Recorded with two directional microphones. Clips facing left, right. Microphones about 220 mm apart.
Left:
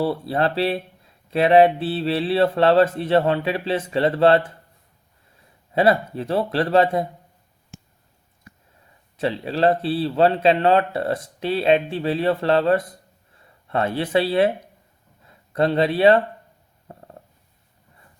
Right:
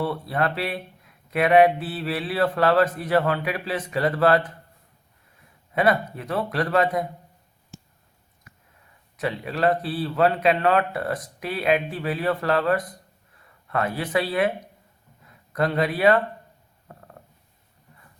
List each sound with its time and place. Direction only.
0.0 s speech: 30° left (ahead or behind)
5.7 s speech: 30° left (ahead or behind)
9.1 s speech: 30° left (ahead or behind)
16.9 s a sound: 25° left (ahead or behind)